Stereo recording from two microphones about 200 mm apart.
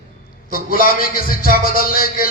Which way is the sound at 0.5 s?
45° left (ahead or behind).